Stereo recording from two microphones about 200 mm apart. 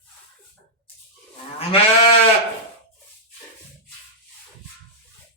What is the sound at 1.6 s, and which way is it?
Livestock, 30° left (ahead or behind).